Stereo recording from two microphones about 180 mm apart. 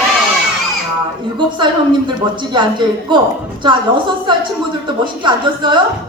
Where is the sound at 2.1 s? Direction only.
25° right (ahead or behind).